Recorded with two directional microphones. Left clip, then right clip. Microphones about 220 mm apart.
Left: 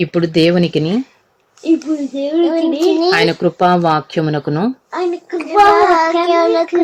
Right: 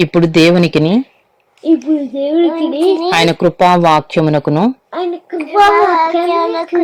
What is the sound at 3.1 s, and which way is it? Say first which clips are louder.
Speech: right 2 dB; 15° right (ahead or behind).